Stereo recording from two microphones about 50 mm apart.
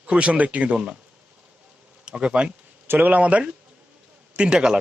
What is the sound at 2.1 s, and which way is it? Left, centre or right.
Speech, centre.